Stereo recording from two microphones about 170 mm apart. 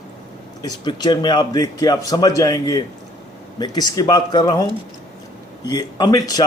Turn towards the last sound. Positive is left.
turn(degrees=20)  # may be behind; listen again after turning